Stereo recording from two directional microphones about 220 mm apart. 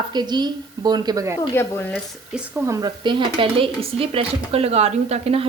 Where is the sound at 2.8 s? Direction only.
20° right (ahead or behind).